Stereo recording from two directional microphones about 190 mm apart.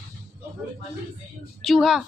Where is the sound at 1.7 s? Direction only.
Centre (ahead or behind).